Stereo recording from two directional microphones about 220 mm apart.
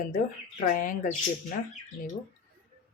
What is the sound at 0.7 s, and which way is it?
Speech, 40° left (ahead or behind).